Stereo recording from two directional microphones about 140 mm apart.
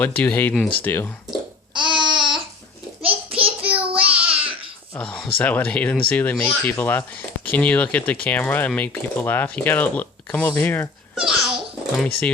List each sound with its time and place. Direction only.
0.0 s speech: 10° left (ahead or behind)
1.7 s babbling: 35° right (ahead or behind)
3.0 s a sound: 40° right (ahead or behind)
3.6 s child singing: 10° right (ahead or behind)
4.3 s babbling: 40° right (ahead or behind)
4.9 s a sound: 5° left (ahead or behind)
5.4 s speech: 10° left (ahead or behind)
11.1 s babbling: 5° right (ahead or behind)